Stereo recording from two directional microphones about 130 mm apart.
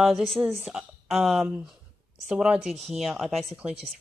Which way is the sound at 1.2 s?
15° right (ahead or behind).